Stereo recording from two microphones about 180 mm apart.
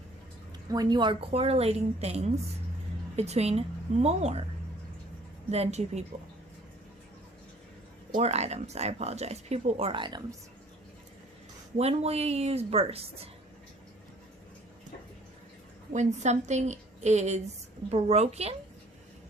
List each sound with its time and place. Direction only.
0.7 s speech: 20° right (ahead or behind)
5.5 s speech: 35° right (ahead or behind)
8.1 s speech: 35° right (ahead or behind)
11.8 s speech: 35° right (ahead or behind)
15.9 s speech: 40° right (ahead or behind)